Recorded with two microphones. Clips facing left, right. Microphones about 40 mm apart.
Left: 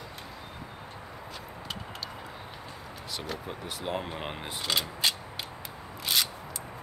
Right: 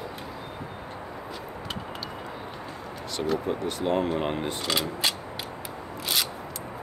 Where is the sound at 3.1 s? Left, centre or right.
Centre.